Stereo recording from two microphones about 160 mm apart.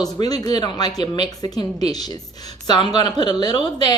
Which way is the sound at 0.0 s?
25° left (ahead or behind).